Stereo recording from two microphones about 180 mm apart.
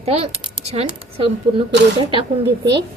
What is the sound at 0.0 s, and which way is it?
Speech, 35° right (ahead or behind).